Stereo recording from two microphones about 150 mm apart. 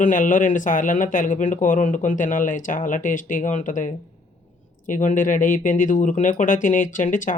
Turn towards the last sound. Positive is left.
turn(degrees=60)  # may be behind; listen again after turning